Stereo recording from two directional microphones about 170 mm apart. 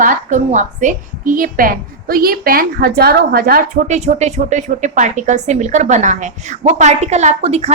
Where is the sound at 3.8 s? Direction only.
40° right (ahead or behind).